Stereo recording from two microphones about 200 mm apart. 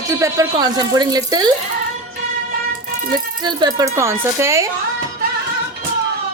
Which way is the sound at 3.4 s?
20° right (ahead or behind).